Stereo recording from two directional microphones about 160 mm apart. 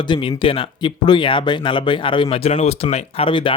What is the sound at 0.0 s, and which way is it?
Speech, 30° left (ahead or behind).